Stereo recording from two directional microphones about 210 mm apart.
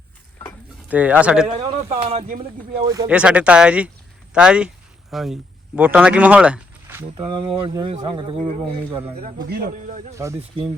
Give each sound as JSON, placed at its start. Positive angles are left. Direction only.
{"t": 0.9, "sound": "speech", "side_deg": -5}
{"t": 1.5, "sound": "speech", "side_deg": -30}
{"t": 2.8, "sound": "speech", "side_deg": -15}
{"t": 3.2, "sound": "speech", "side_deg": -5}
{"t": 7.2, "sound": "speech", "side_deg": -25}
{"t": 9.5, "sound": "speech", "side_deg": -40}
{"t": 10.2, "sound": "speech", "side_deg": -15}